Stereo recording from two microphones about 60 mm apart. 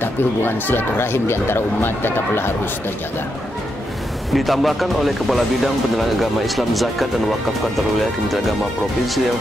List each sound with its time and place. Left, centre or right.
0.0 s speech: left
4.3 s speech: centre